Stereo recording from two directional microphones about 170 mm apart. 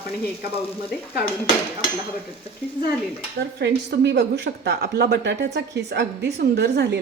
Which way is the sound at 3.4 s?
90° right.